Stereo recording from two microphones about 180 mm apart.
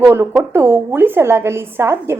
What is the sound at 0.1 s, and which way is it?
A woman's voice, 15° right (ahead or behind).